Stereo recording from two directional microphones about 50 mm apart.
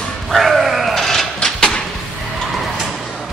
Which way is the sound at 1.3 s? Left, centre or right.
Centre.